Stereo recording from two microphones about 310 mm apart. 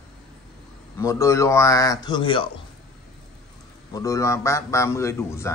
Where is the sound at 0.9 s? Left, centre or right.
Centre.